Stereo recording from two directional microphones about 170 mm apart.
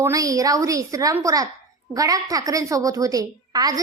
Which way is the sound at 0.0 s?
20° right (ahead or behind).